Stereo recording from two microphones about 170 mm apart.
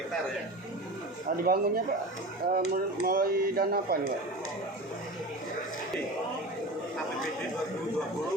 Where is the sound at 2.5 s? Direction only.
60° right (ahead or behind).